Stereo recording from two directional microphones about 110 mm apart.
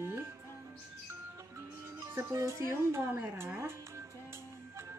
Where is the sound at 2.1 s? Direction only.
25° right (ahead or behind).